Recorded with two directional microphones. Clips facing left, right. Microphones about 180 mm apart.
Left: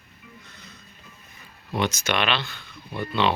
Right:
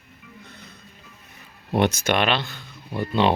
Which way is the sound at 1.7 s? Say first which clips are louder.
Right 5 dB; 60° right (ahead or behind).